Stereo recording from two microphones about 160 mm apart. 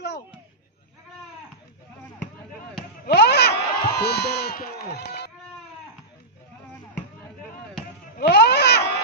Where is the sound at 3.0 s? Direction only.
90° left.